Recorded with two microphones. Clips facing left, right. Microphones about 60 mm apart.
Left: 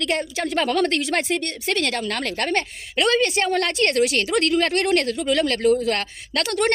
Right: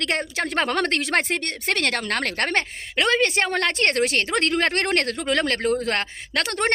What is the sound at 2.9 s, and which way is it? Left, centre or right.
Speech, right.